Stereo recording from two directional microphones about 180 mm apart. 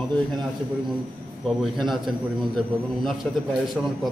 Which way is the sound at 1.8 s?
Centre (ahead or behind).